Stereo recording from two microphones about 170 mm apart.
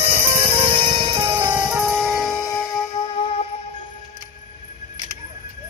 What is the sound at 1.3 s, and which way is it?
Music, 10° right (ahead or behind).